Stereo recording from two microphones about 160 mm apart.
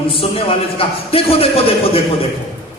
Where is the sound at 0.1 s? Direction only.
35° left (ahead or behind).